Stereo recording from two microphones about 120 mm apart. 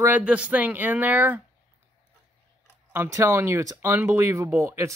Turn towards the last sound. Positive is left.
turn(degrees=-25)  # may be behind; listen again after turning